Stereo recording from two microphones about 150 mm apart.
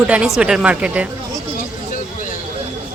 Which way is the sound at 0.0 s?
5° right (ahead or behind).